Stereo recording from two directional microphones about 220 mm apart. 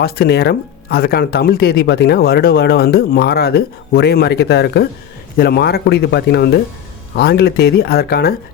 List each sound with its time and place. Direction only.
0.0 s speech: 45° left (ahead or behind)